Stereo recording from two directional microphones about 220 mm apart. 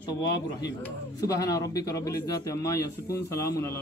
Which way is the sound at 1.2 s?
15° left (ahead or behind).